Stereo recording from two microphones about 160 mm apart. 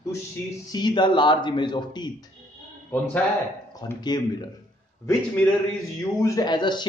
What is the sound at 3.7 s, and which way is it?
Speech, 25° left (ahead or behind).